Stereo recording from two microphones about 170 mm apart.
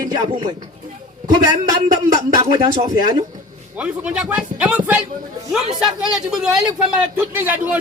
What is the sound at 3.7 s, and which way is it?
A man's voice, 10° right (ahead or behind).